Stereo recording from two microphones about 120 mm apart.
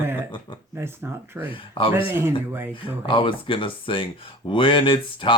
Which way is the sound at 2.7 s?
45° left (ahead or behind).